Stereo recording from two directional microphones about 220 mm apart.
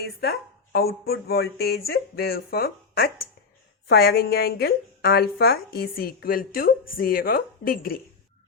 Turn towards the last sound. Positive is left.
turn(degrees=40)  # may be behind; listen again after turning